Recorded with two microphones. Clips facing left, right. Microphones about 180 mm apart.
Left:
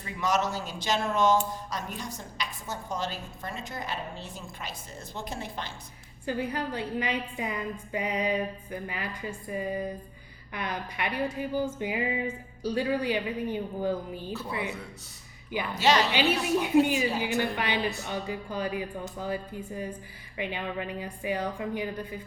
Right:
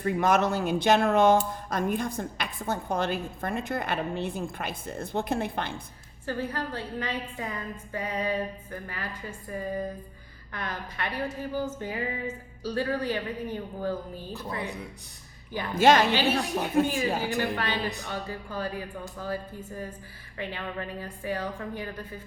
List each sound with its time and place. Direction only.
0.0 s a woman's voice: 55° right (ahead or behind)
6.2 s speech: 15° left (ahead or behind)
15.7 s speech: 50° right (ahead or behind)
17.6 s speech: 15° left (ahead or behind)